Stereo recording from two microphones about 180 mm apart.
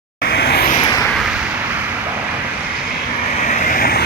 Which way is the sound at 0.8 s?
20° left (ahead or behind).